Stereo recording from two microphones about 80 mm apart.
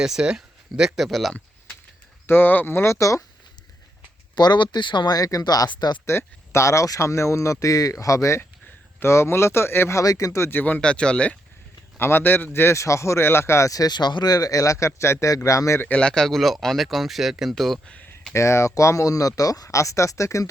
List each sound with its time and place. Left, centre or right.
0.0 s speech: centre
2.2 s speech: left
4.4 s speech: left
5.1 s speech: left
6.1 s speech: left
10.0 s speech: left
10.8 s speech: centre
11.9 s speech: left
13.9 s speech: left
15.8 s speech: centre
17.8 s speech: centre
18.3 s speech: left